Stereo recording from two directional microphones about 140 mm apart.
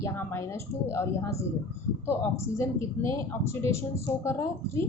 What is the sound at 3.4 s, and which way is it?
Speech, 20° left (ahead or behind).